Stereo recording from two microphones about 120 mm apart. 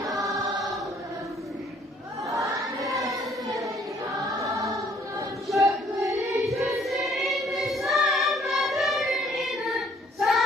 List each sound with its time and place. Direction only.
2.2 s choir: 30° right (ahead or behind)
5.6 s child singing: 25° right (ahead or behind)
6.4 s choir: centre (ahead or behind)